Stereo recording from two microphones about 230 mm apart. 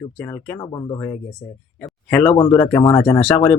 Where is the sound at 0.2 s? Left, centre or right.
Centre.